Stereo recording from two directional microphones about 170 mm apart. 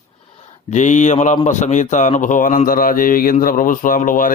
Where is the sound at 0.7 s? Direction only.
45° left (ahead or behind).